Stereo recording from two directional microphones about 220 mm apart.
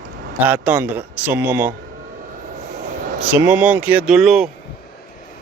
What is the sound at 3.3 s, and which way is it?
Speech, 10° right (ahead or behind).